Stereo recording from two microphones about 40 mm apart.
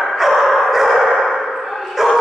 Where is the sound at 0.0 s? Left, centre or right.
Centre.